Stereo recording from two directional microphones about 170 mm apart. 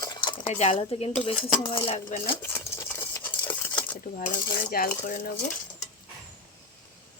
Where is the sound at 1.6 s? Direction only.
30° left (ahead or behind).